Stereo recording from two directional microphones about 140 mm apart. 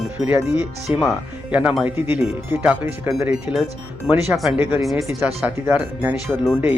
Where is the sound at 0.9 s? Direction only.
5° right (ahead or behind).